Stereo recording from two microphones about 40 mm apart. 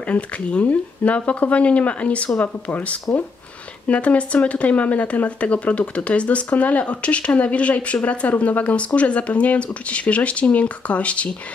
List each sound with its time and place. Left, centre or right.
0.0 s speech: left